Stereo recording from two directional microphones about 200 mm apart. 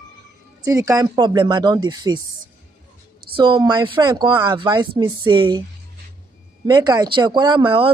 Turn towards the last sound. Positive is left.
turn(degrees=-25)  # may be behind; listen again after turning